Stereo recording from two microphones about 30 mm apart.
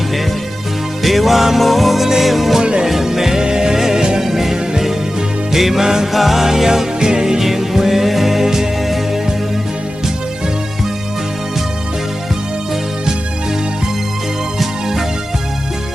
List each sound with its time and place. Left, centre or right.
1.0 s music: centre
2.6 s music: right
2.8 s music: centre
14.6 s music: centre